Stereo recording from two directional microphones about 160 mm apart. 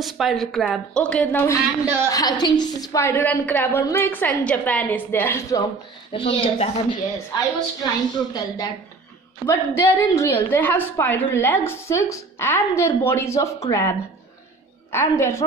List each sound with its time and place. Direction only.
0.0 s a woman's voice: centre (ahead or behind)
2.0 s a woman's voice: 25° left (ahead or behind)
6.1 s a woman's voice: 35° left (ahead or behind); by 15.4 s 15° left (ahead or behind)